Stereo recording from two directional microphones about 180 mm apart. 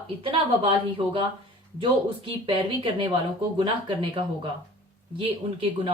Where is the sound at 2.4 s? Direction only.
25° right (ahead or behind).